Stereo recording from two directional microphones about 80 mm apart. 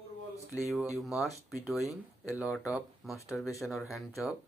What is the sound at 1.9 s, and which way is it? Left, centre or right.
Speech, left.